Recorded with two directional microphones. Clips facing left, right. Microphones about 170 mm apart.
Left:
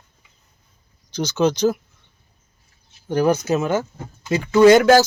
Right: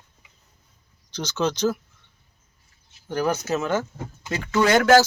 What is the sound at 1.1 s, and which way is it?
Speech, 10° left (ahead or behind).